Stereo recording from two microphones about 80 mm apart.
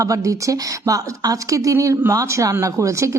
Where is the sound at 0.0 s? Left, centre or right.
Right.